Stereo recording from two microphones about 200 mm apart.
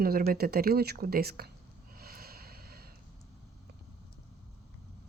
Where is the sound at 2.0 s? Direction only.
50° right (ahead or behind).